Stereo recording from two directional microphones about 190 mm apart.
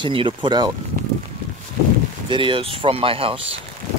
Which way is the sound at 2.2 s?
25° right (ahead or behind).